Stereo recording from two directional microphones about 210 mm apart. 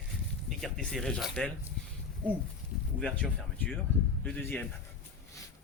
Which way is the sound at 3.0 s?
5° left (ahead or behind).